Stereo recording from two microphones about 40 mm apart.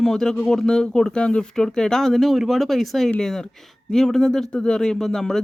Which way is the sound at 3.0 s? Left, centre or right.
Centre.